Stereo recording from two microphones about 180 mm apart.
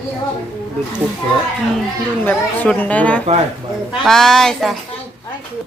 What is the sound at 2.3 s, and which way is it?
A woman's voice, 10° left (ahead or behind).